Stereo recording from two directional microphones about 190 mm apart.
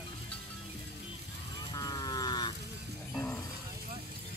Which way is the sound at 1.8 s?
20° left (ahead or behind).